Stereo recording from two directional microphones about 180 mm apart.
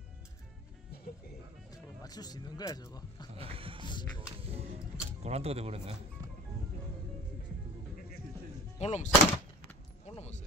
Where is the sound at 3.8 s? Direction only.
25° left (ahead or behind).